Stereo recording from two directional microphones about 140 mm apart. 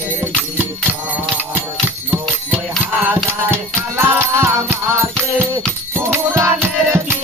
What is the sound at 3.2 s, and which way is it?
Music, 15° right (ahead or behind).